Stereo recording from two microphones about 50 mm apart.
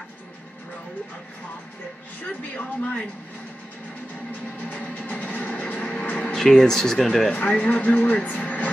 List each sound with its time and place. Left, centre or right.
2.2 s music: left
4.6 s music: left
6.3 s speech: centre
7.6 s music: left